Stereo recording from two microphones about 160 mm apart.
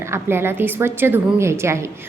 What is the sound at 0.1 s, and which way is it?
A woman's voice, 15° right (ahead or behind).